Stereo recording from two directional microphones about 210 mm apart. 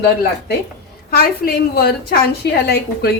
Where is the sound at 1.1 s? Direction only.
45° left (ahead or behind).